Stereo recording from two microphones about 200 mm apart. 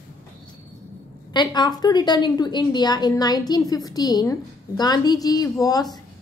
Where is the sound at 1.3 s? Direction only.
20° left (ahead or behind).